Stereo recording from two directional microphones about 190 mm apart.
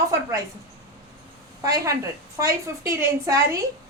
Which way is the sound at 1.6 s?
15° right (ahead or behind).